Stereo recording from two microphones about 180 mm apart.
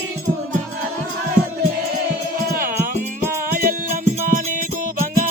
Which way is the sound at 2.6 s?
50° right (ahead or behind).